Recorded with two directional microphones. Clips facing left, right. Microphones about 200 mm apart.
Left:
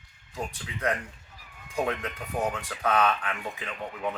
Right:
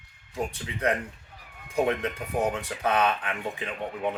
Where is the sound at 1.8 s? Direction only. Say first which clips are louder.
Right 4 dB; 20° right (ahead or behind).